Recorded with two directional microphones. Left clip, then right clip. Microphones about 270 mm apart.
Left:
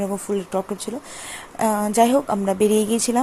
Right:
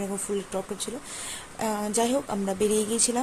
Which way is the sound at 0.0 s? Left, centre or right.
Centre.